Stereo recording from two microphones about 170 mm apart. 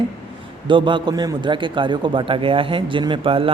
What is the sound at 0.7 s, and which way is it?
A man's voice, 30° right (ahead or behind).